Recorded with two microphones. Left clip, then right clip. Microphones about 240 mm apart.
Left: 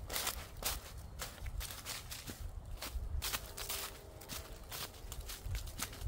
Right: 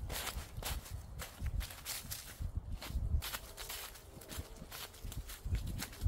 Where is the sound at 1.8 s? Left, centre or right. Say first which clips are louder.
Right 2 dB; centre.